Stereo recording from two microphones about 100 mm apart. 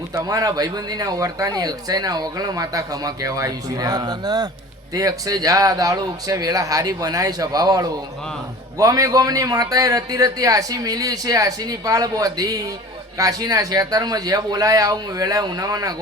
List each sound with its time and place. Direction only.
0.1 s speech: 35° right (ahead or behind)